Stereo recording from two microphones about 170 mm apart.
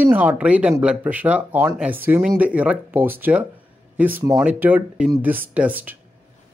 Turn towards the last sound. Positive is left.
turn(degrees=-10)  # may be behind; listen again after turning